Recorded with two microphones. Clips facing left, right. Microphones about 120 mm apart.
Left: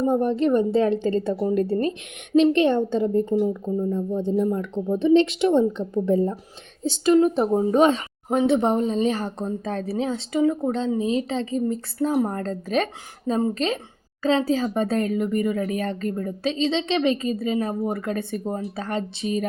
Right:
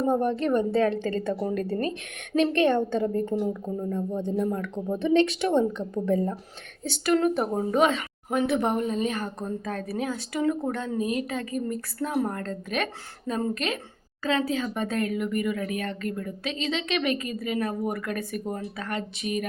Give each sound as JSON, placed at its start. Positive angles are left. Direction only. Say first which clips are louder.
{"t": 0.1, "sound": "a woman's voice", "louder": "left 3 dB", "side_deg": 15}
{"t": 4.9, "sound": "a woman's voice", "louder": "left 4 dB", "side_deg": 20}
{"t": 7.7, "sound": "a woman's voice", "louder": "left 4 dB", "side_deg": 35}